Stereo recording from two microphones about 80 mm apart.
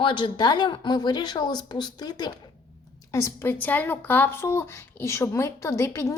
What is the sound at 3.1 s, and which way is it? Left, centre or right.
Speech, left.